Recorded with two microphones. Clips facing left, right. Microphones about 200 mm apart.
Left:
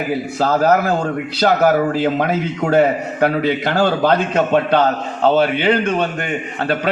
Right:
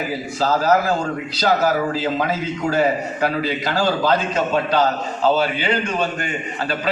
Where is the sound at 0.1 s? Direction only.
55° left (ahead or behind).